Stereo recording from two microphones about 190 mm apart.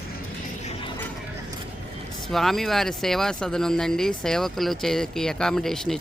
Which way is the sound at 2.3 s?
Centre (ahead or behind).